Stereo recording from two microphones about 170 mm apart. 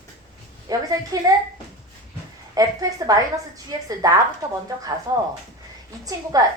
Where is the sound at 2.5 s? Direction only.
20° right (ahead or behind).